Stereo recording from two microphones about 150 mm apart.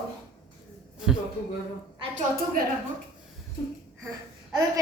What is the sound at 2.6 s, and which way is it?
Speech, 75° right (ahead or behind).